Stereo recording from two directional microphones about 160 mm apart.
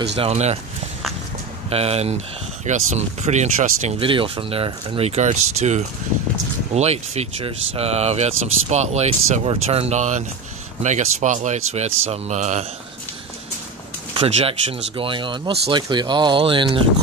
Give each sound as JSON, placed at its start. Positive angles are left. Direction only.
{"t": 0.1, "sound": "speech", "side_deg": -40}
{"t": 1.7, "sound": "speech", "side_deg": -40}
{"t": 14.1, "sound": "speech", "side_deg": -35}